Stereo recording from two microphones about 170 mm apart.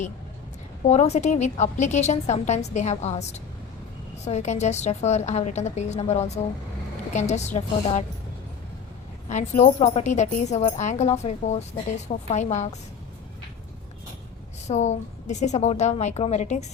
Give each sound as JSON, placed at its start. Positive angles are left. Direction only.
{"t": 0.9, "sound": "a woman's voice", "side_deg": 40}
{"t": 9.3, "sound": "a woman's voice", "side_deg": 45}
{"t": 14.7, "sound": "a woman's voice", "side_deg": 40}